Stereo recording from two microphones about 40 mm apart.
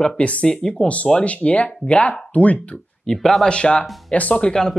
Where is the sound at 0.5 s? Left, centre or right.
Centre.